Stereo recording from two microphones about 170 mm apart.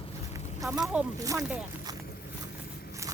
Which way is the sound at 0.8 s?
5° right (ahead or behind).